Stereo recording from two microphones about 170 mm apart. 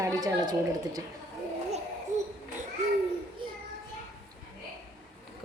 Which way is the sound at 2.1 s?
45° right (ahead or behind).